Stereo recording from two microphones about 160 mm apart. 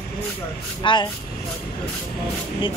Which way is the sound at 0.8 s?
30° left (ahead or behind).